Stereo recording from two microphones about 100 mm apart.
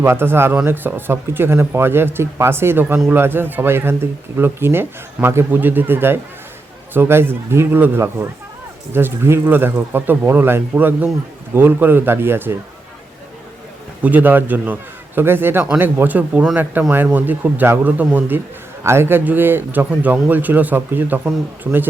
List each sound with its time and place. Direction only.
0.0 s speech: 25° right (ahead or behind)
14.0 s speech: 15° right (ahead or behind)